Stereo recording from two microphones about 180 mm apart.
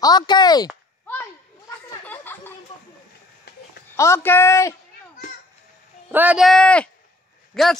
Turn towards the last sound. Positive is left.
turn(degrees=0)  # may be behind; listen again after turning